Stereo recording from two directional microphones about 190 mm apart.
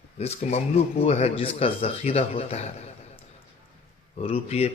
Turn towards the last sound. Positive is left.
turn(degrees=30)  # may be behind; listen again after turning